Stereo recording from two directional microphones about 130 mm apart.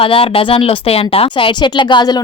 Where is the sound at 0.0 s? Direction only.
45° left (ahead or behind).